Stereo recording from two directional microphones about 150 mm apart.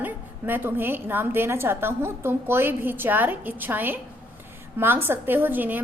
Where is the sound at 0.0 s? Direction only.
15° right (ahead or behind).